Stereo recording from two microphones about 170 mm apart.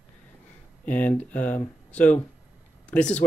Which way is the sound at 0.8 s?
10° left (ahead or behind).